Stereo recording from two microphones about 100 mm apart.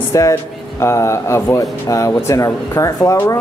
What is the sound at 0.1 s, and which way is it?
Speech, 30° left (ahead or behind).